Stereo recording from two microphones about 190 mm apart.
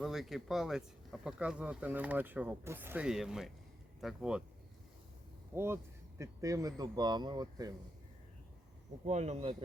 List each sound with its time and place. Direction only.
0.0 s speech: centre (ahead or behind)
5.5 s speech: 15° right (ahead or behind)
9.0 s speech: 35° right (ahead or behind)